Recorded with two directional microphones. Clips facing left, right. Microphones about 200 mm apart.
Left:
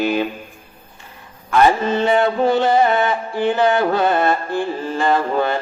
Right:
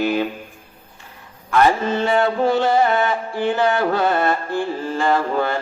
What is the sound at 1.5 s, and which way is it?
Mantra, 20° left (ahead or behind).